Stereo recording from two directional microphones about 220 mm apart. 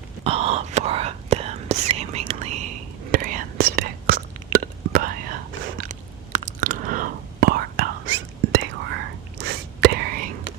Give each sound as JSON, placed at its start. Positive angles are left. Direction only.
{"t": 0.3, "sound": "whispering", "side_deg": -25}